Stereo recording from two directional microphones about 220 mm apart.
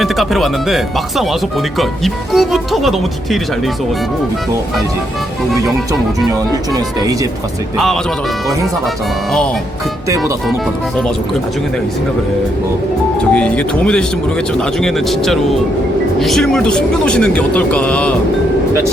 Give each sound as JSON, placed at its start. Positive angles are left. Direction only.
{"t": 0.0, "sound": "speech", "side_deg": 0}
{"t": 6.1, "sound": "speech", "side_deg": -15}
{"t": 13.3, "sound": "speech", "side_deg": 5}